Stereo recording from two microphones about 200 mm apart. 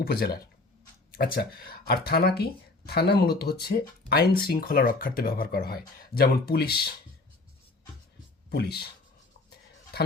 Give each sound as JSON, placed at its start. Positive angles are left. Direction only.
{"t": 0.0, "sound": "speech", "side_deg": 50}
{"t": 8.4, "sound": "speech", "side_deg": 55}